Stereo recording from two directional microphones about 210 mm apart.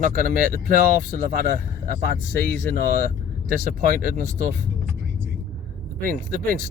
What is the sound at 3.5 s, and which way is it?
Speech, 40° right (ahead or behind).